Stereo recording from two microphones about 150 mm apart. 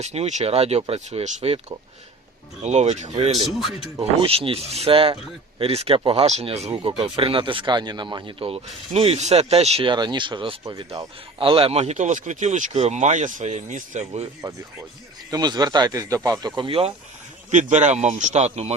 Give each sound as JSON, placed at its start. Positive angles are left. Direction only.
{"t": 0.0, "sound": "speech", "side_deg": -45}
{"t": 2.6, "sound": "speech", "side_deg": -50}
{"t": 4.3, "sound": "speech", "side_deg": -40}
{"t": 15.3, "sound": "speech", "side_deg": -25}
{"t": 16.6, "sound": "speech", "side_deg": -35}
{"t": 17.5, "sound": "speech", "side_deg": -55}